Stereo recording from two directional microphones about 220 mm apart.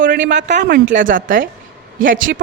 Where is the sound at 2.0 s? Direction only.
60° right (ahead or behind).